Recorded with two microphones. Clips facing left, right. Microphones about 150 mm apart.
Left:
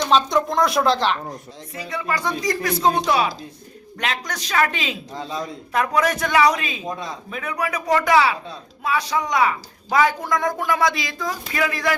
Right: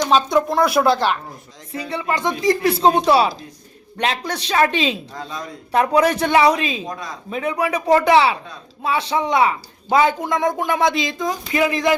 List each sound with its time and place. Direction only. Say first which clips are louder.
0.1 s speech: right 1 dB; 5° right (ahead or behind)
1.7 s speech: right 3 dB; 30° right (ahead or behind)